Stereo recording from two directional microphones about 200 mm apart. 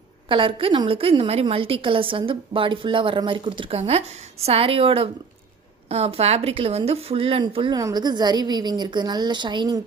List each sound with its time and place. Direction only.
0.3 s a woman's voice: 25° right (ahead or behind)